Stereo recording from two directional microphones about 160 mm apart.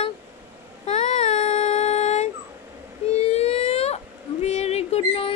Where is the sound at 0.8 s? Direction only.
45° left (ahead or behind).